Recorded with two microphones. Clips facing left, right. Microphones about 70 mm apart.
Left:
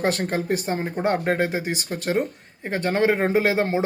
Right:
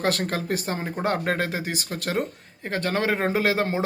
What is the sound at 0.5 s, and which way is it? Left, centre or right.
Speech, centre.